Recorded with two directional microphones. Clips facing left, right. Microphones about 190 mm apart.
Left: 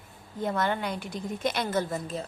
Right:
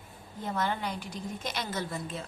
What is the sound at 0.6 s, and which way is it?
A woman's voice, 60° left (ahead or behind).